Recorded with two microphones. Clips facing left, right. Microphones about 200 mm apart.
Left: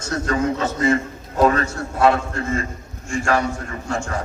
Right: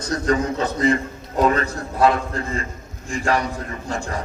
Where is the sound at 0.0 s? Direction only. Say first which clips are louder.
Right 1 dB; 35° right (ahead or behind).